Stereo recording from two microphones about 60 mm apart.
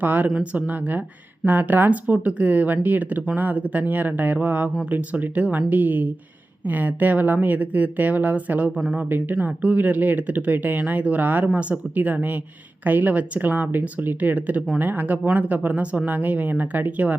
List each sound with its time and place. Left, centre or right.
0.0 s speech: right